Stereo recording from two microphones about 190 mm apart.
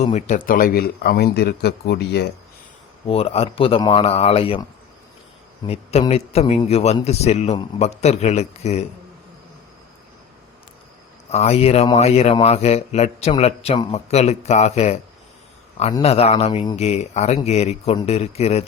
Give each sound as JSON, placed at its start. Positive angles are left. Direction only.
{"t": 0.0, "sound": "speech", "side_deg": 40}
{"t": 3.1, "sound": "speech", "side_deg": 30}
{"t": 5.6, "sound": "speech", "side_deg": 30}
{"t": 11.3, "sound": "speech", "side_deg": 35}